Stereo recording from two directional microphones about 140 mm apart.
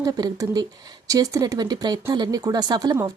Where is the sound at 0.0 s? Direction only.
25° right (ahead or behind).